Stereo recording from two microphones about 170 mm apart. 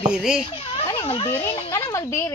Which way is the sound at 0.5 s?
30° left (ahead or behind).